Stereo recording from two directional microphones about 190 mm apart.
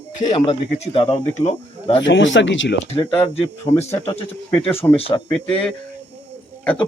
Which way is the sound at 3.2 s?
35° left (ahead or behind).